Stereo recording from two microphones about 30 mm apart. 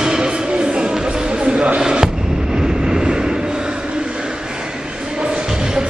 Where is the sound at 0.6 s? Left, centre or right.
Right.